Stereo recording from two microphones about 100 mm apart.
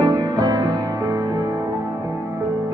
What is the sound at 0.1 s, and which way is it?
Music, 35° right (ahead or behind).